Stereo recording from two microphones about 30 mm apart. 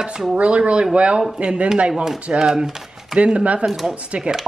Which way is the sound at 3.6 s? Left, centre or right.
Right.